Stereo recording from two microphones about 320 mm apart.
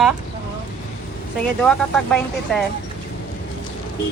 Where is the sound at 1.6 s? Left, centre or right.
Centre.